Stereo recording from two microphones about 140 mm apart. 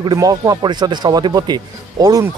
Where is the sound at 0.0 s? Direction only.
30° right (ahead or behind).